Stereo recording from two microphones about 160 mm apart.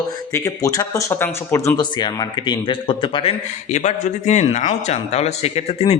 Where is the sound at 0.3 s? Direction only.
20° left (ahead or behind).